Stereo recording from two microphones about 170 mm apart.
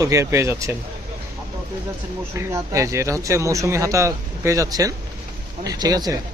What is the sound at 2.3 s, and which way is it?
Speech, 15° right (ahead or behind).